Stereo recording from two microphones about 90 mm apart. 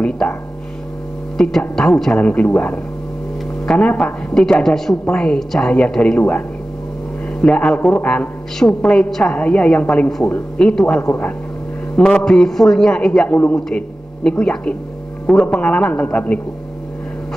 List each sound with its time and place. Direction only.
0.0 s a sound: 10° left (ahead or behind)
1.4 s speech: 5° left (ahead or behind)
2.2 s a woman's voice: 15° left (ahead or behind)
7.4 s a woman's voice: 10° left (ahead or behind)
11.9 s mantra: 10° left (ahead or behind)
12.3 s a woman's voice: 5° left (ahead or behind)
13.7 s a woman's voice: 5° left (ahead or behind)